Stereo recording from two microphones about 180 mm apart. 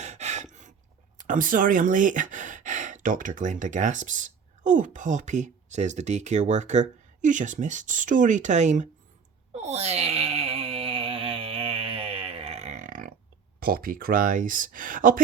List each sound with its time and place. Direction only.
0.0 s gasp: 40° right (ahead or behind)
1.3 s speech: 50° right (ahead or behind)
9.5 s wail: 40° right (ahead or behind)
13.6 s speech: 55° right (ahead or behind)